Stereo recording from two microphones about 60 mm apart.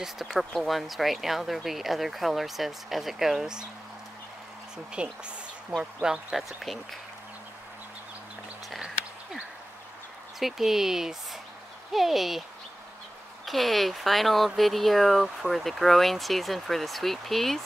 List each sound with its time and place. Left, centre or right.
0.0 s speech: centre
4.9 s speech: centre
6.3 s speech: centre
8.7 s a sound: centre
10.4 s speech: centre
13.5 s speech: centre